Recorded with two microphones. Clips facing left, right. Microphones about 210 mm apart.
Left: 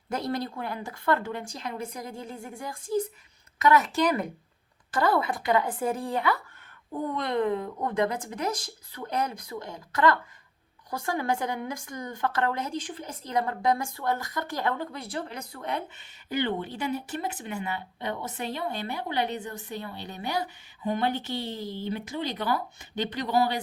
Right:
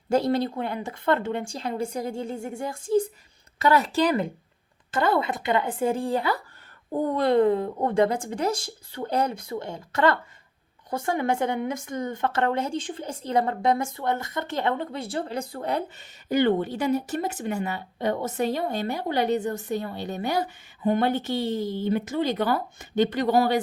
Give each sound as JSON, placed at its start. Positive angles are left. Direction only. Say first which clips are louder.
{"t": 0.1, "sound": "a woman's voice", "louder": "right 8 dB", "side_deg": -30}